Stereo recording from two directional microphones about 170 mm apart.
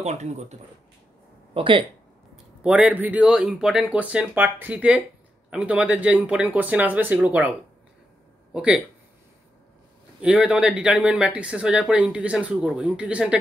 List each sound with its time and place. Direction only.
0.0 s speech: 40° right (ahead or behind)
1.5 s speech: 30° right (ahead or behind)
2.3 s speech: 5° right (ahead or behind)
8.5 s speech: 5° right (ahead or behind)
10.2 s speech: 5° right (ahead or behind)